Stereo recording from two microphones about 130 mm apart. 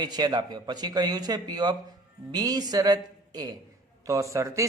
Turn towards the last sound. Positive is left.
turn(degrees=-25)  # may be behind; listen again after turning